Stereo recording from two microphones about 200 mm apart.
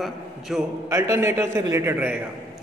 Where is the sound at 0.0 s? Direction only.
Centre (ahead or behind).